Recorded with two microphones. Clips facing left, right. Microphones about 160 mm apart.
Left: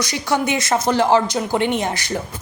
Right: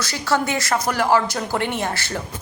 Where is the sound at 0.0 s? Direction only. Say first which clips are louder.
Left 1 dB; 15° left (ahead or behind).